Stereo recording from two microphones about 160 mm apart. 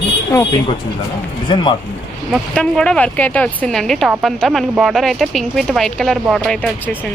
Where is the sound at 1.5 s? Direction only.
30° left (ahead or behind).